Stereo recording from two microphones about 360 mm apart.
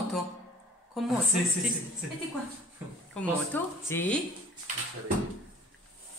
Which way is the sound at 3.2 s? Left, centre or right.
Centre.